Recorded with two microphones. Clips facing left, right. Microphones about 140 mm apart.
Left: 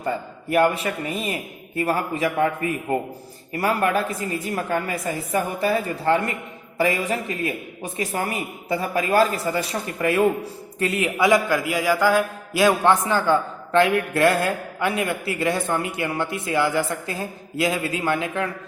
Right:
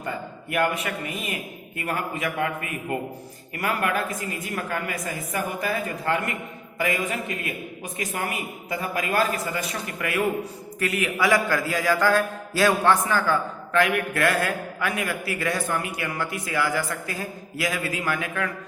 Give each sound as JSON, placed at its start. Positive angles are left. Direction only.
{"t": 0.5, "sound": "a woman's voice", "side_deg": 30}